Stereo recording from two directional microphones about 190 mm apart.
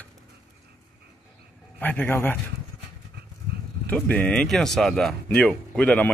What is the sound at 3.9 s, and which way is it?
Speech, 5° left (ahead or behind).